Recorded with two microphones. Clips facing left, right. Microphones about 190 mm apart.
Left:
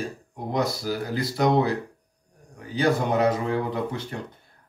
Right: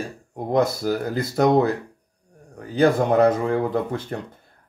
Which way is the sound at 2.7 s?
55° right (ahead or behind).